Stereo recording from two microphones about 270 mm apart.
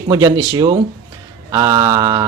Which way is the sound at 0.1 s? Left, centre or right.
Centre.